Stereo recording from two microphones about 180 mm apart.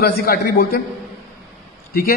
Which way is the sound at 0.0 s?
55° left (ahead or behind).